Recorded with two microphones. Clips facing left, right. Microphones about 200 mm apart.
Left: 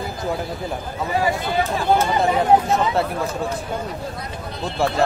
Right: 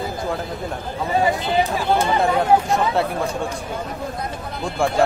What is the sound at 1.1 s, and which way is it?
Speech, 20° right (ahead or behind).